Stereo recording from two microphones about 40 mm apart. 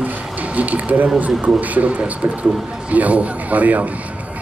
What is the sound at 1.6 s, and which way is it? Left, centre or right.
Speech, right.